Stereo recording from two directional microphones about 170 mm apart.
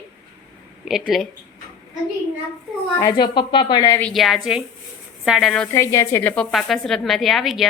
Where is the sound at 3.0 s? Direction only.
25° left (ahead or behind).